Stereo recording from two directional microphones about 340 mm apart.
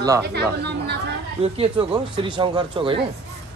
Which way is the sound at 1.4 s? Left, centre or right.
Centre.